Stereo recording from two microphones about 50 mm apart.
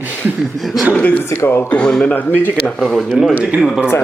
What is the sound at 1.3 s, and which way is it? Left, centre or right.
Speech, left.